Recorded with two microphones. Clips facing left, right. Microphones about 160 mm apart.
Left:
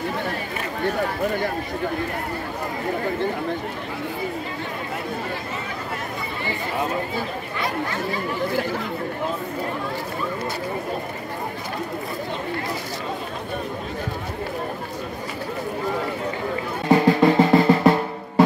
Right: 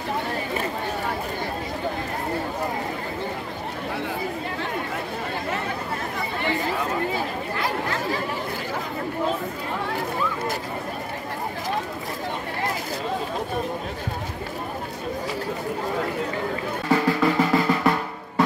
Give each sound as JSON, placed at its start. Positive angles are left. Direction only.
{"t": 16.9, "sound": "drum", "side_deg": 25}